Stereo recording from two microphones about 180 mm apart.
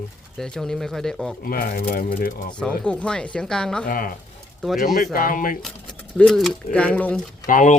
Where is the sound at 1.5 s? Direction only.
55° left (ahead or behind).